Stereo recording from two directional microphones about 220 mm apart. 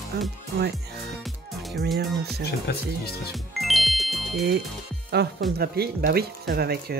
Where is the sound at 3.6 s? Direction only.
Centre (ahead or behind).